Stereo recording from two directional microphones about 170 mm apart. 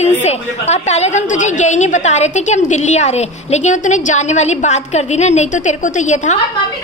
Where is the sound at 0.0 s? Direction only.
40° left (ahead or behind).